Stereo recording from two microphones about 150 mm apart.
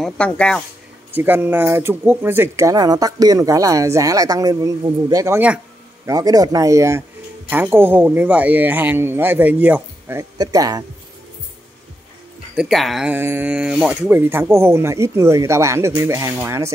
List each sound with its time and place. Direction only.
0.2 s speech: 5° left (ahead or behind)
1.1 s speech: 15° right (ahead or behind)
12.5 s speech: centre (ahead or behind); by 16.7 s 20° right (ahead or behind)